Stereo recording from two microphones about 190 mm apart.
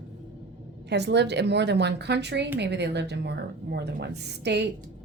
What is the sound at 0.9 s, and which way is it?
A woman's voice, 65° right (ahead or behind).